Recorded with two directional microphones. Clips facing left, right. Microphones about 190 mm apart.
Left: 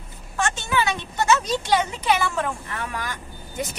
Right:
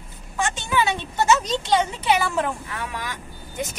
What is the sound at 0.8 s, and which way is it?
Speech, 25° right (ahead or behind).